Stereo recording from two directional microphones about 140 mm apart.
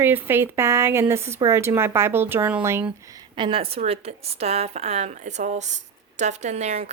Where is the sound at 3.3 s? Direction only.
40° right (ahead or behind).